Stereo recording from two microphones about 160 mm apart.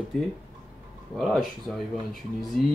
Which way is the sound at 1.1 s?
Centre (ahead or behind).